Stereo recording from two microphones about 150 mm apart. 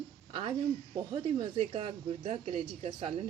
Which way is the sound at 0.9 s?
30° right (ahead or behind).